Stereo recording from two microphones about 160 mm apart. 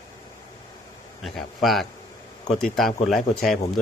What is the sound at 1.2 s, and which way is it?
Speech, centre (ahead or behind).